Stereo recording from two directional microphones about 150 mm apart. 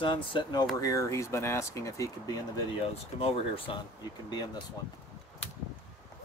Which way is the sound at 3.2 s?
40° left (ahead or behind).